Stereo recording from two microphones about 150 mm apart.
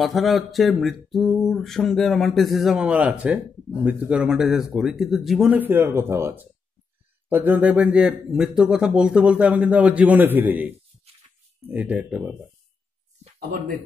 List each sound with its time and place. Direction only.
0.0 s speech: centre (ahead or behind)
13.5 s speech: 65° right (ahead or behind)